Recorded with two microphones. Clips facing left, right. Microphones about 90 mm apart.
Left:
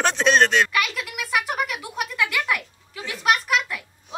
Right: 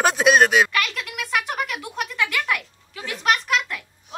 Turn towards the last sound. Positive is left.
turn(degrees=0)  # may be behind; listen again after turning